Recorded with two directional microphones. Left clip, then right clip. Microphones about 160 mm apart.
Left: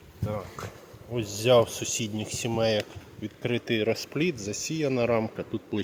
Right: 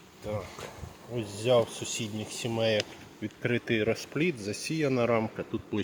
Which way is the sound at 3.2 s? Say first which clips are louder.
Even; 15° left (ahead or behind).